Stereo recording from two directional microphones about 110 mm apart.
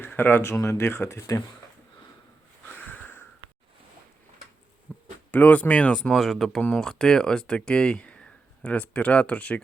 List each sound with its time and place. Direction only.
0.0 s speech: 20° left (ahead or behind)
2.6 s sniff: 15° left (ahead or behind)
4.9 s a sound: 20° left (ahead or behind)
5.3 s speech: 15° left (ahead or behind)